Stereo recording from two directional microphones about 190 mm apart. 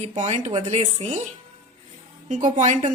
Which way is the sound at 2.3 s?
40° right (ahead or behind).